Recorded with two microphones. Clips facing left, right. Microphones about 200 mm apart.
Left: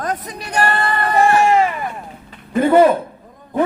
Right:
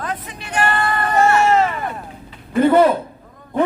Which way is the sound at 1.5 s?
10° left (ahead or behind).